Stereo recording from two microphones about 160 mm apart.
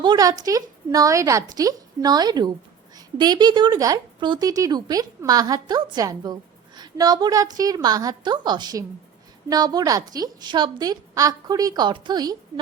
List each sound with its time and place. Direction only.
0.0 s speech: 25° right (ahead or behind)